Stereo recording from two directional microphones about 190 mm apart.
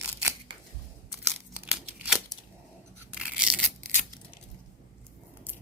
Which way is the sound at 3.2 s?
5° right (ahead or behind).